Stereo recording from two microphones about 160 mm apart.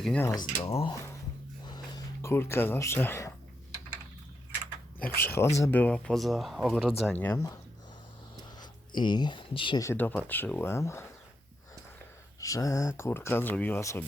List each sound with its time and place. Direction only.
0.0 s speech: 5° left (ahead or behind)
0.3 s speech: 20° left (ahead or behind)
0.7 s speech: 35° left (ahead or behind)
1.6 s a sound: 25° left (ahead or behind)
5.2 s speech: 15° left (ahead or behind)
7.1 s speech: 10° left (ahead or behind)
8.6 s speech: 30° left (ahead or behind)
9.8 s speech: 15° left (ahead or behind)
12.4 s speech: 20° left (ahead or behind)